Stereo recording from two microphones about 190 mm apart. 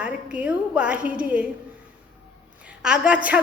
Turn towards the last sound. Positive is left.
turn(degrees=-5)  # may be behind; listen again after turning